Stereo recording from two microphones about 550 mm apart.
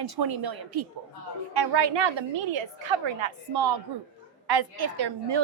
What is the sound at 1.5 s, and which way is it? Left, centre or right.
A woman's voice, right.